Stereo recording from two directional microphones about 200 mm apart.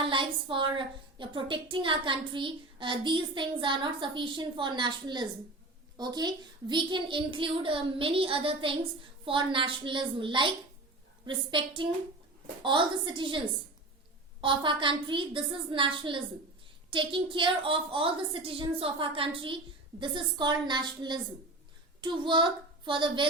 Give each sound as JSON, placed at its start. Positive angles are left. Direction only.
{"t": 0.0, "sound": "a woman's voice", "side_deg": -25}
{"t": 14.4, "sound": "a woman's voice", "side_deg": -25}